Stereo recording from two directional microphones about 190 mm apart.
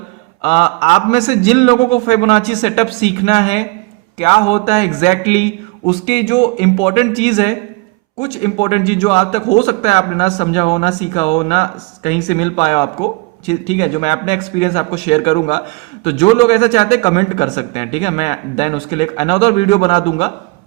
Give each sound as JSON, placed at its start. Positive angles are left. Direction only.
{"t": 0.4, "sound": "a man's voice", "side_deg": 35}